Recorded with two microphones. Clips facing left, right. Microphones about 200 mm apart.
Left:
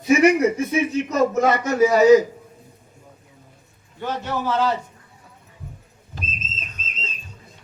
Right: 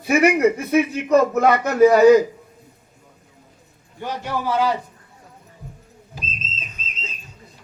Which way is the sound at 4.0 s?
15° right (ahead or behind).